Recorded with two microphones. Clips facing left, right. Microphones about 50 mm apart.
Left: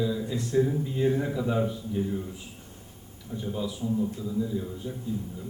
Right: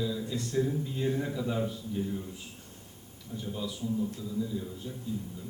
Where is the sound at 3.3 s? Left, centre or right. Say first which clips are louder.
Left 4 dB; centre.